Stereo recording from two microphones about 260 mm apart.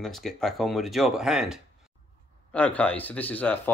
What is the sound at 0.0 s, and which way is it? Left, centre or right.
A man's voice, centre.